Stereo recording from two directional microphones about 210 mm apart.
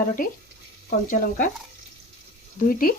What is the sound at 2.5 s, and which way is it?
Speech, 45° left (ahead or behind).